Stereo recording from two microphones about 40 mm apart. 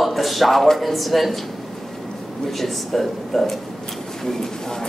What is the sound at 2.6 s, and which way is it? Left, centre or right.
Speech, centre.